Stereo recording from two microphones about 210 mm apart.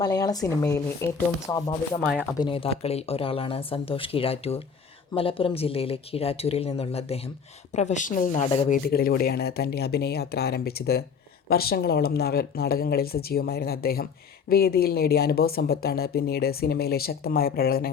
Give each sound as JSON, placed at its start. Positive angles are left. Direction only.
{"t": 0.0, "sound": "speech", "side_deg": 20}
{"t": 2.0, "sound": "speech", "side_deg": 0}
{"t": 2.4, "sound": "speech", "side_deg": 25}
{"t": 8.8, "sound": "speech", "side_deg": 45}